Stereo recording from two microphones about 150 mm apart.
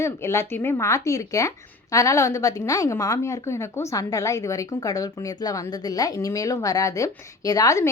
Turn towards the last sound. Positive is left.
turn(degrees=20)  # may be behind; listen again after turning